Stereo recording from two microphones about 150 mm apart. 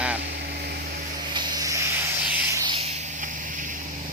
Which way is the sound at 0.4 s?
90° right.